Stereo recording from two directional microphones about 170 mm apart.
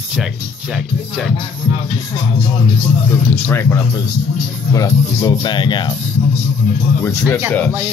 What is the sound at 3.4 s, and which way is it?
Speech, 15° left (ahead or behind).